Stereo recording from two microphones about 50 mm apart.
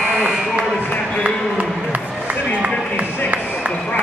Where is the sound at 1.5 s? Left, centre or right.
Right.